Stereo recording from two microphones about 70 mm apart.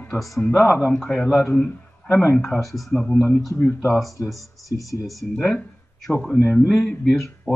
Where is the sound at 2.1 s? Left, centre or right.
Left.